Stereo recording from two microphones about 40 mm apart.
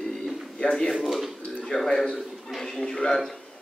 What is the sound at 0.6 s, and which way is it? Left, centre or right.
Speech, left.